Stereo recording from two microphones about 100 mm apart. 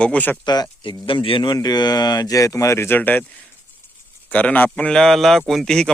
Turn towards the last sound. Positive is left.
turn(degrees=5)  # may be behind; listen again after turning